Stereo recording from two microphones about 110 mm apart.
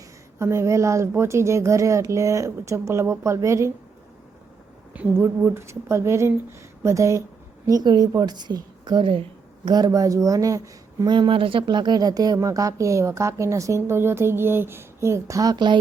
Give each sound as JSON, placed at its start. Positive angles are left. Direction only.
{"t": 0.3, "sound": "speech", "side_deg": -25}
{"t": 4.9, "sound": "speech", "side_deg": -15}
{"t": 7.7, "sound": "a woman's voice", "side_deg": -35}
{"t": 9.6, "sound": "a woman's voice", "side_deg": -35}
{"t": 11.0, "sound": "speech", "side_deg": -45}